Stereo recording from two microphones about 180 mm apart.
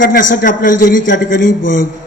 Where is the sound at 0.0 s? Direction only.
50° left (ahead or behind).